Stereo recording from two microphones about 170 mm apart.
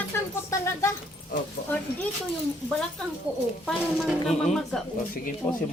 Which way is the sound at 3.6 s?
Centre (ahead or behind).